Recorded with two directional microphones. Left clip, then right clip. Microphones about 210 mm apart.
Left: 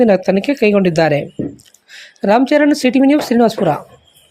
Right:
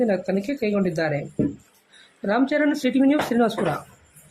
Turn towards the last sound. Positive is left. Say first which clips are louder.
# left 9 dB
turn(degrees=25)  # may be behind; listen again after turning